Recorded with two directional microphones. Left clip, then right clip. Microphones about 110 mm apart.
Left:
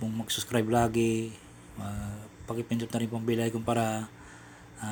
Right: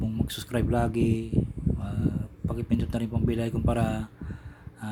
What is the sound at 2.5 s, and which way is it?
Speech, 45° right (ahead or behind).